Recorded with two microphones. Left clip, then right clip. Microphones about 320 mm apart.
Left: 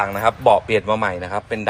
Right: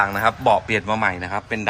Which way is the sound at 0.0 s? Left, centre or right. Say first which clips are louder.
Left 1 dB; centre.